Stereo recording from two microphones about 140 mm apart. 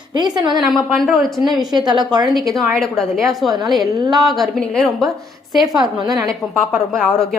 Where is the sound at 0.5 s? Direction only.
Centre (ahead or behind).